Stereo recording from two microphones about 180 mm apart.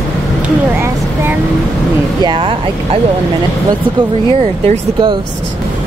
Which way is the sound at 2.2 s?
30° right (ahead or behind).